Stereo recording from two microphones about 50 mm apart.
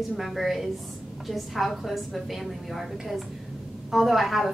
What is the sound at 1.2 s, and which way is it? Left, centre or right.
A woman's voice, centre.